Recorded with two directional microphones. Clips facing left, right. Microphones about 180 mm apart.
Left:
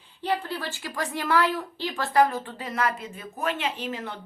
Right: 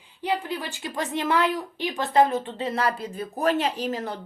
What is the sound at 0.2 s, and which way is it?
A woman's voice, 15° right (ahead or behind).